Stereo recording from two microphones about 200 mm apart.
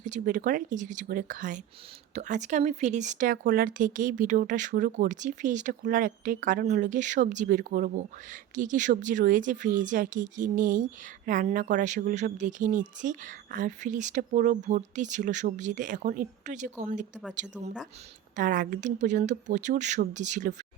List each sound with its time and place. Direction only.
0.0 s speech: 40° right (ahead or behind)
18.3 s speech: 40° right (ahead or behind)